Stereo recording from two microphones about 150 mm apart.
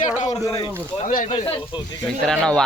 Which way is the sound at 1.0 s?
60° left (ahead or behind).